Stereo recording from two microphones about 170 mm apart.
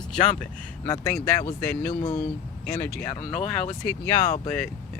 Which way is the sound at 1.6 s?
5° left (ahead or behind).